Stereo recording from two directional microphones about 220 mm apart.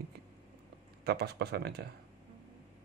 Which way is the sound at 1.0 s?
45° right (ahead or behind).